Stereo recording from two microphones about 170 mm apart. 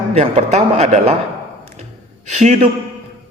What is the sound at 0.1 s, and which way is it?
A man's voice, 40° right (ahead or behind).